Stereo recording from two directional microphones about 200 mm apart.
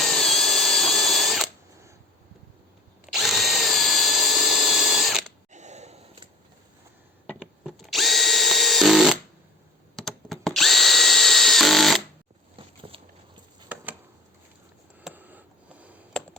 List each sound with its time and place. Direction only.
0.0 s drill: centre (ahead or behind)
3.1 s drill: centre (ahead or behind)
5.5 s sigh: 35° right (ahead or behind)
7.6 s drill: centre (ahead or behind)
12.5 s a sound: 25° right (ahead or behind)
15.0 s a sound: 10° right (ahead or behind)